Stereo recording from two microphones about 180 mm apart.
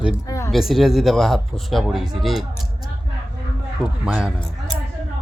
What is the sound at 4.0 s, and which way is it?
Speech, 10° right (ahead or behind).